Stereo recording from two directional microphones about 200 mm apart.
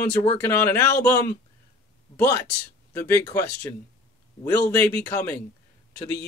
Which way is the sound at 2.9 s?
15° left (ahead or behind).